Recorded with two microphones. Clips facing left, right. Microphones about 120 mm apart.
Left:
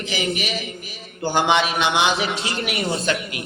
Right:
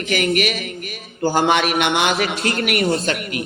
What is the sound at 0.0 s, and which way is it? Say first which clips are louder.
Speech: right 6 dB; 60° right (ahead or behind).